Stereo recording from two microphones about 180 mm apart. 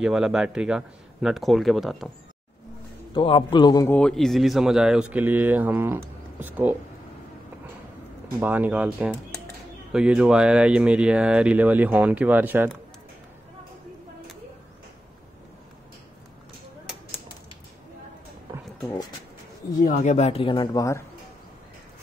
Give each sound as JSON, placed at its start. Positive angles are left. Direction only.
{"t": 0.0, "sound": "speech", "side_deg": -5}
{"t": 3.2, "sound": "a man's voice", "side_deg": 30}
{"t": 3.9, "sound": "speech", "side_deg": 5}
{"t": 8.4, "sound": "speech", "side_deg": -10}
{"t": 19.9, "sound": "speech", "side_deg": 45}